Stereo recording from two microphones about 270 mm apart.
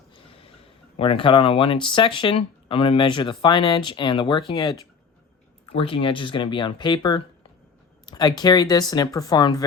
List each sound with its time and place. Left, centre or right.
0.9 s speech: centre